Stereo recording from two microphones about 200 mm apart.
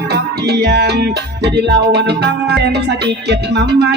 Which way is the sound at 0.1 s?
55° right (ahead or behind).